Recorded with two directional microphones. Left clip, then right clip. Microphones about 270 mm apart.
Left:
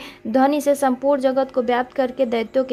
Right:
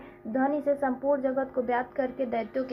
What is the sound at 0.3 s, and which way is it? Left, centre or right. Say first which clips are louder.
A woman's voice: left 9 dB; left.